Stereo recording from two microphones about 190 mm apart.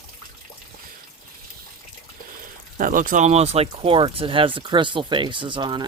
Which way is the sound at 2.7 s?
45° right (ahead or behind).